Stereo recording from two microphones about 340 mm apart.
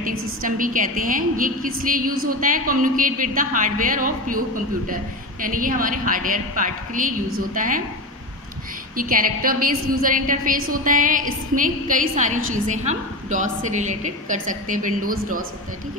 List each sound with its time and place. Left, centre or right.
0.4 s a woman's voice: right
8.9 s a woman's voice: right